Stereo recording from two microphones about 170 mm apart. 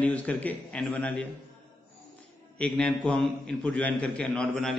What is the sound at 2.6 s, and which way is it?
A man's voice, 5° left (ahead or behind).